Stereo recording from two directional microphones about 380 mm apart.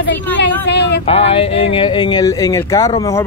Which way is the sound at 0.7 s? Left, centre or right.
Left.